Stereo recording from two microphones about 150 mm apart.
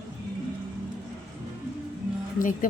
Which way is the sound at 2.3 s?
65° left (ahead or behind).